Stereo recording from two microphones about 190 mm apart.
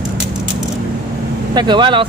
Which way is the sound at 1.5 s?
25° right (ahead or behind).